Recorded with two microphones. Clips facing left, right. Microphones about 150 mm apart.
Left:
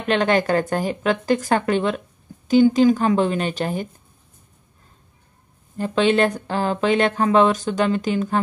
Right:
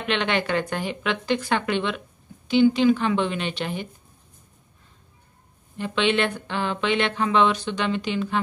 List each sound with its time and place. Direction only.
0.0 s speech: 40° left (ahead or behind)
5.8 s speech: 40° left (ahead or behind)